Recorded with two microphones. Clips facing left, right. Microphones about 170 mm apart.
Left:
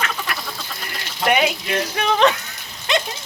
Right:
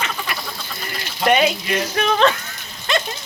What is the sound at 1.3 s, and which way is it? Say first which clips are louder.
Speech: right 2 dB; 5° left (ahead or behind).